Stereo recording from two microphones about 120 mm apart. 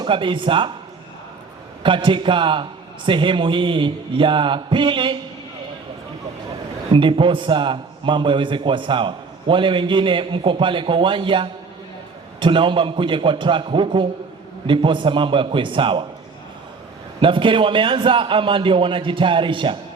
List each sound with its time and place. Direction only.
0.0 s a man's voice: 45° right (ahead or behind)
1.8 s a man's voice: 45° right (ahead or behind)
6.9 s a man's voice: 45° right (ahead or behind)
17.2 s a man's voice: 45° right (ahead or behind)